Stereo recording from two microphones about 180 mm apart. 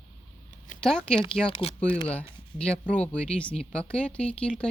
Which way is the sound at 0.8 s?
5° left (ahead or behind).